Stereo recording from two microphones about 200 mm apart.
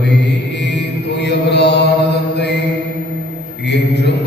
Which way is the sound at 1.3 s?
55° left (ahead or behind).